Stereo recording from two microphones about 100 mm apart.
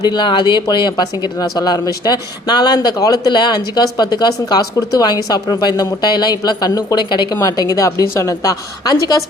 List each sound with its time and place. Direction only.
0.0 s a woman's voice: 45° left (ahead or behind)